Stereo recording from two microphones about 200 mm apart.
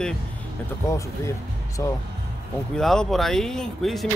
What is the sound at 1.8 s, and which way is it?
Speech, 15° left (ahead or behind).